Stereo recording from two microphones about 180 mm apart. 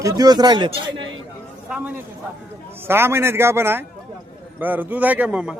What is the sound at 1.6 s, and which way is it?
A man's voice, 5° right (ahead or behind).